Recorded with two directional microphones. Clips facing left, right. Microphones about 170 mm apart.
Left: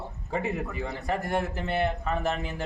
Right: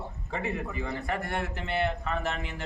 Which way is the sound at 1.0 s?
40° left (ahead or behind).